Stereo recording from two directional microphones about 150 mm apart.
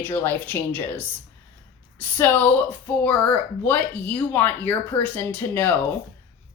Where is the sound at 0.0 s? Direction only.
15° left (ahead or behind).